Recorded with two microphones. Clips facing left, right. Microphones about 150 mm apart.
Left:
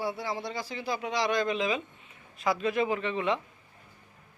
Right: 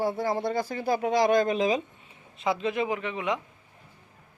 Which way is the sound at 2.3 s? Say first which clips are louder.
Even; 25° right (ahead or behind).